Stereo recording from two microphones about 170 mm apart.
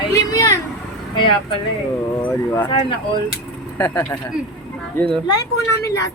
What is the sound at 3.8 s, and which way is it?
Speech, 15° left (ahead or behind).